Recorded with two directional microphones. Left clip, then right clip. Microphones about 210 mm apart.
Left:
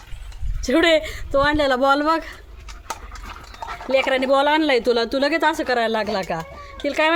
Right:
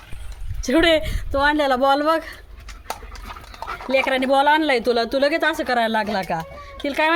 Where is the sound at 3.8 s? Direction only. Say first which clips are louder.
Left 1 dB; centre (ahead or behind).